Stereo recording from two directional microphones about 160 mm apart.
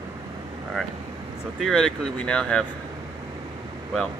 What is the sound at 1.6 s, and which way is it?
Speech, 5° left (ahead or behind).